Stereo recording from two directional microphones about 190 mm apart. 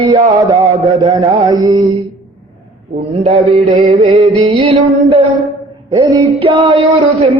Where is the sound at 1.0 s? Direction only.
25° right (ahead or behind).